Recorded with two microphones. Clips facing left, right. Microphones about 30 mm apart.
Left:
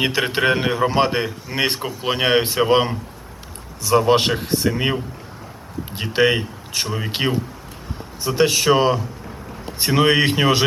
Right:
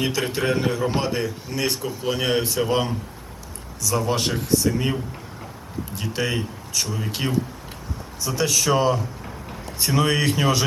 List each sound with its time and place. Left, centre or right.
0.0 s a man's voice: left